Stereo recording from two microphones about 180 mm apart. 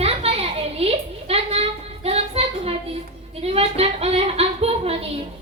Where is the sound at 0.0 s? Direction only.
35° right (ahead or behind).